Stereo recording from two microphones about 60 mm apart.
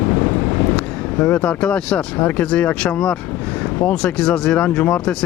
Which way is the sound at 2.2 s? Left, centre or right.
Left.